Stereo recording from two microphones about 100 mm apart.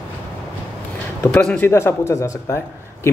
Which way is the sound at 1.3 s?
10° left (ahead or behind).